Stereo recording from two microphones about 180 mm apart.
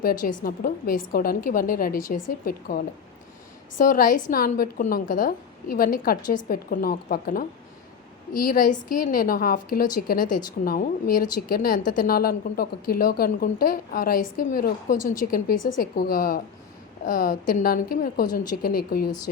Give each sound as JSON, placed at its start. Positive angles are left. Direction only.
{"t": 0.0, "sound": "a woman's voice", "side_deg": 50}